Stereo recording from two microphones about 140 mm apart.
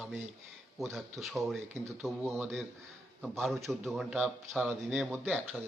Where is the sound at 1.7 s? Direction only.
20° right (ahead or behind).